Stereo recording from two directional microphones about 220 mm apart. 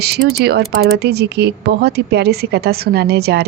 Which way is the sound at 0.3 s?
45° right (ahead or behind).